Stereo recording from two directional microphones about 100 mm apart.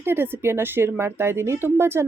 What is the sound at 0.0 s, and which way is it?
Speech, 25° right (ahead or behind).